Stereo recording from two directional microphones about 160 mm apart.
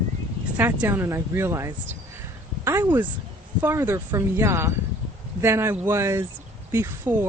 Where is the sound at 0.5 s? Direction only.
10° right (ahead or behind).